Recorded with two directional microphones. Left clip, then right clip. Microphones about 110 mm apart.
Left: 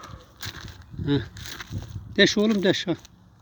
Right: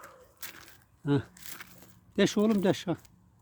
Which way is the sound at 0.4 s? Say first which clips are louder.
Left 9 dB; 70° left (ahead or behind).